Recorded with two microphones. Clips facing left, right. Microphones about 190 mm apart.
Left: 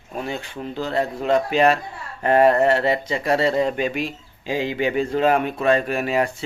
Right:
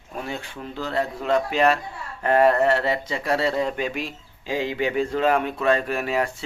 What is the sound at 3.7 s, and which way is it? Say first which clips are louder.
Speech: left 4 dB; centre (ahead or behind).